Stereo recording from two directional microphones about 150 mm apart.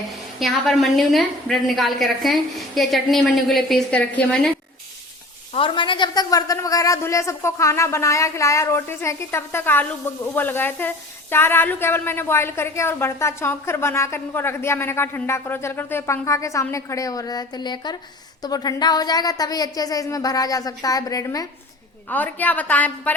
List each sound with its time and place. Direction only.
0.3 s a woman's voice: centre (ahead or behind)
5.5 s a woman's voice: 35° left (ahead or behind)
22.1 s a woman's voice: 10° left (ahead or behind)